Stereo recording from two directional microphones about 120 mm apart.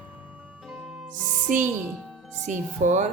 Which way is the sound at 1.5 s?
90° right.